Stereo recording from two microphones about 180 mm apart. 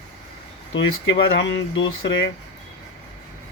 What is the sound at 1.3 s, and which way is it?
Speech, 90° left.